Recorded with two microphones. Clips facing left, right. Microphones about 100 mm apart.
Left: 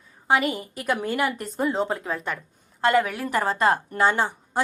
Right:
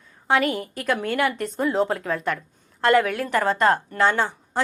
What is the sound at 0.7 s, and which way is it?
A woman's voice, 10° left (ahead or behind).